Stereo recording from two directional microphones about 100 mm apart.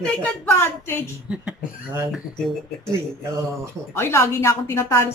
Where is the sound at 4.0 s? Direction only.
25° left (ahead or behind).